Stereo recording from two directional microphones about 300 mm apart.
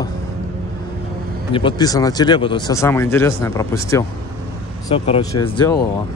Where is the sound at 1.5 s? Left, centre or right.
Centre.